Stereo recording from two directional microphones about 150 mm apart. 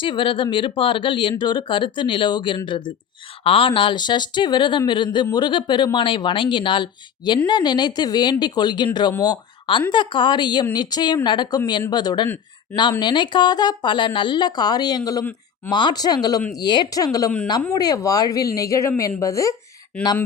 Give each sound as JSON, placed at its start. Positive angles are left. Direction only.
{"t": 0.0, "sound": "speech", "side_deg": 35}
{"t": 15.2, "sound": "speech", "side_deg": 10}
{"t": 15.7, "sound": "speech", "side_deg": 30}